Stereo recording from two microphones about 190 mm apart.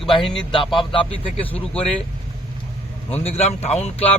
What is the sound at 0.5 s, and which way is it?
Speech, 25° left (ahead or behind).